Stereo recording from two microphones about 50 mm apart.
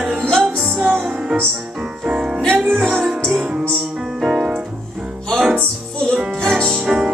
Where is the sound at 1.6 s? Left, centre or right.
Centre.